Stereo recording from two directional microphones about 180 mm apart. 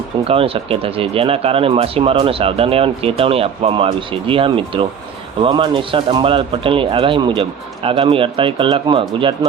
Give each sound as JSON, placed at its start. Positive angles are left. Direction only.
{"t": 0.3, "sound": "speech", "side_deg": -30}